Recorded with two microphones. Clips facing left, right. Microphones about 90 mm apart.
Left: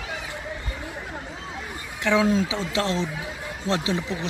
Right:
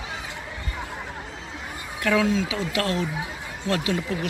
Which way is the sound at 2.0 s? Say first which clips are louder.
Left 1 dB; 20° left (ahead or behind).